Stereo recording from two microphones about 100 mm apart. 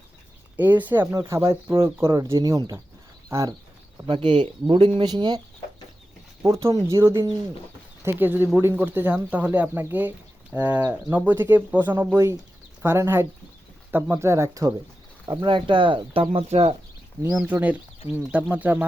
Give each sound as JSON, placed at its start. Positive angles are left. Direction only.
{"t": 0.6, "sound": "speech", "side_deg": -20}
{"t": 1.3, "sound": "speech", "side_deg": -30}
{"t": 4.1, "sound": "speech", "side_deg": -55}
{"t": 6.4, "sound": "speech", "side_deg": -30}
{"t": 8.0, "sound": "speech", "side_deg": -20}
{"t": 15.4, "sound": "speech", "side_deg": -55}
{"t": 16.3, "sound": "speech", "side_deg": -75}
{"t": 17.3, "sound": "speech", "side_deg": -15}